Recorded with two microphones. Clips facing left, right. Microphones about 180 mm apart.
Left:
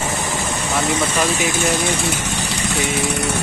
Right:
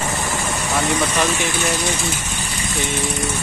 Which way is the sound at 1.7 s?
60° left (ahead or behind).